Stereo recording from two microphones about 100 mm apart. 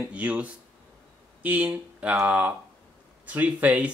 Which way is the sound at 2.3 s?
15° right (ahead or behind).